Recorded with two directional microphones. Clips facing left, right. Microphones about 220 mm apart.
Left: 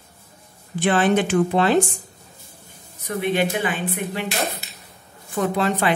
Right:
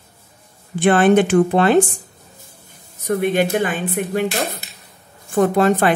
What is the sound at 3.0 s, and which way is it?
Speech, 45° right (ahead or behind).